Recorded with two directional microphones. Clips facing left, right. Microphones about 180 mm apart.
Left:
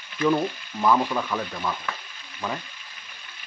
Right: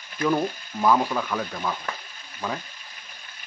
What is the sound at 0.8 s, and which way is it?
Speech, 5° right (ahead or behind).